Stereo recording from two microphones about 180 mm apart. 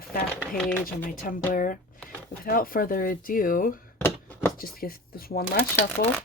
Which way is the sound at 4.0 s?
10° left (ahead or behind).